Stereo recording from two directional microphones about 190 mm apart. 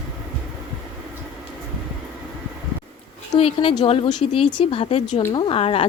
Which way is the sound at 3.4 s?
30° left (ahead or behind).